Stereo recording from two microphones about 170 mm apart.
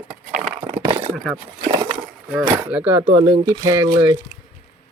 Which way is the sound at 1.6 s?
25° right (ahead or behind).